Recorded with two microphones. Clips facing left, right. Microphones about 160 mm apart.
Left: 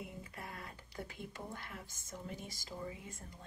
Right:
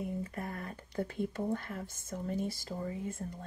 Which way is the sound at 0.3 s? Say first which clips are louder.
Right 8 dB; 50° right (ahead or behind).